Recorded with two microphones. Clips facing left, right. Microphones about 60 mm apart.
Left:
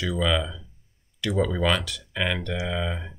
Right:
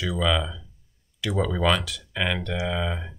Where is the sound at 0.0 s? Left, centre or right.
Centre.